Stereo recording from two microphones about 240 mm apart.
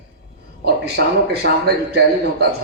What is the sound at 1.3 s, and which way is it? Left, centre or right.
A man's voice, right.